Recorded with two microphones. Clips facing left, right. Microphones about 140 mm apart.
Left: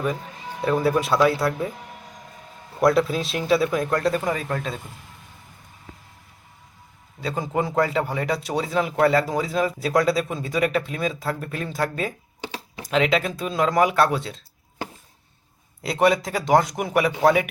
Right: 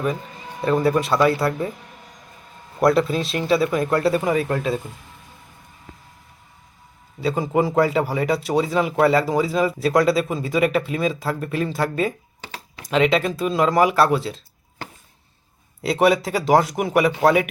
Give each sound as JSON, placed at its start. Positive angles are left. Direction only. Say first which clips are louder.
{"t": 0.6, "sound": "a man's voice", "louder": "right 2 dB", "side_deg": 0}
{"t": 2.8, "sound": "a man's voice", "louder": "right 1 dB", "side_deg": 0}
{"t": 7.2, "sound": "a man's voice", "louder": "right 5 dB", "side_deg": 0}
{"t": 12.4, "sound": "computer keyboard", "louder": "left 4 dB", "side_deg": 20}
{"t": 12.9, "sound": "a man's voice", "louder": "right 3 dB", "side_deg": 0}
{"t": 15.8, "sound": "a man's voice", "louder": "right 2 dB", "side_deg": 0}